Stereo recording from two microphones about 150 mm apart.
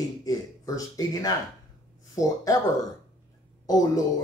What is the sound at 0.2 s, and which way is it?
Speech, 25° left (ahead or behind).